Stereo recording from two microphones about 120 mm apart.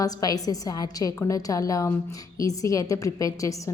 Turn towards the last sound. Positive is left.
turn(degrees=30)  # may be behind; listen again after turning